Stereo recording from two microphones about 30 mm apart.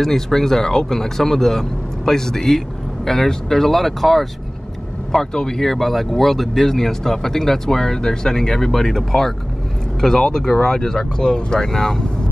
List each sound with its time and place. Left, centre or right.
0.0 s speech: centre
5.1 s speech: left
5.6 s speech: centre
6.6 s speech: centre